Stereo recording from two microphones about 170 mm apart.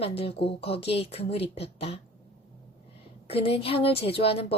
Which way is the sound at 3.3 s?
35° left (ahead or behind).